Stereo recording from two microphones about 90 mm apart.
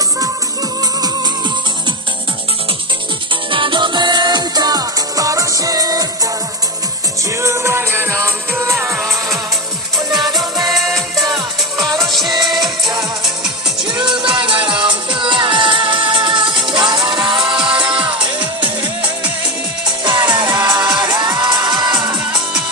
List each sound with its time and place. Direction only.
3.5 s music: 65° right (ahead or behind); by 6.1 s 45° right (ahead or behind)
7.4 s music: 30° right (ahead or behind)
10.7 s music: centre (ahead or behind)
14.2 s music: 65° right (ahead or behind)
20.1 s music: 55° right (ahead or behind)